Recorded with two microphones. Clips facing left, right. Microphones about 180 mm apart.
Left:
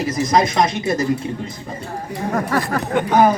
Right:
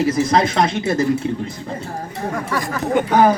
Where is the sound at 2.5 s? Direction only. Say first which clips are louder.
Left 3 dB; 55° left (ahead or behind).